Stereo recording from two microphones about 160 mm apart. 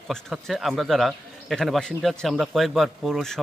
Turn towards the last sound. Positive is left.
turn(degrees=0)  # may be behind; listen again after turning